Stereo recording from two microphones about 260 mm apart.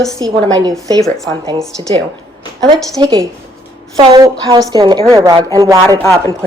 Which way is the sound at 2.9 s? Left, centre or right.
Centre.